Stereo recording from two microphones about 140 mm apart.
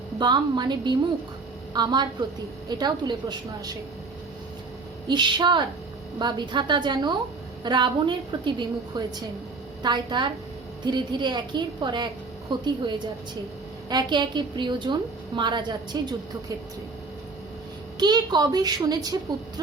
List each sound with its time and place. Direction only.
0.2 s a woman's voice: 30° right (ahead or behind)
5.0 s a woman's voice: 30° right (ahead or behind)
13.9 s a woman's voice: 35° right (ahead or behind)
18.0 s a woman's voice: 30° right (ahead or behind)